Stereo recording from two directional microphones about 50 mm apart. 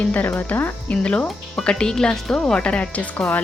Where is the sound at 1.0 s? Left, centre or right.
Left.